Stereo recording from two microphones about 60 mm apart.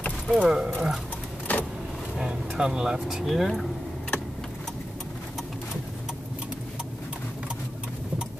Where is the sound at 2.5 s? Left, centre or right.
Centre.